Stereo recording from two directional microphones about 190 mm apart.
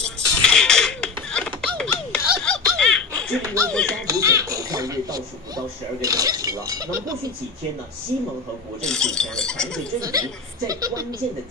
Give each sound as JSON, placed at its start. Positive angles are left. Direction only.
{"t": 0.0, "sound": "music", "side_deg": 5}
{"t": 2.4, "sound": "laughter", "side_deg": 5}
{"t": 3.4, "sound": "speech", "side_deg": -15}
{"t": 8.8, "sound": "speech", "side_deg": 5}
{"t": 9.9, "sound": "speech", "side_deg": -20}